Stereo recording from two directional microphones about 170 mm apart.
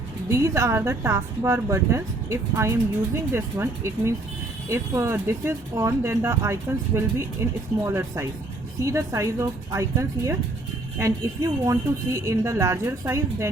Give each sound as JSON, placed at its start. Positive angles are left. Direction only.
{"t": 0.3, "sound": "speech", "side_deg": -15}